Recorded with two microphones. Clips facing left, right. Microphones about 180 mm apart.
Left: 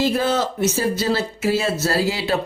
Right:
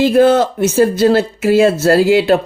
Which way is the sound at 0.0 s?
55° right (ahead or behind).